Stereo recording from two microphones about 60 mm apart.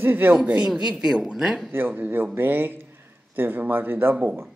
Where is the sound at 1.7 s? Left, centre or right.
Right.